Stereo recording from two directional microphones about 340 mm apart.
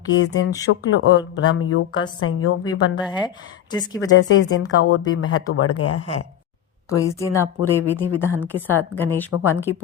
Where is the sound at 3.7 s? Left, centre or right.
Centre.